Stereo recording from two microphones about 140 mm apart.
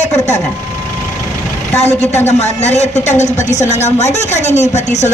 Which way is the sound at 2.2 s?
50° left (ahead or behind).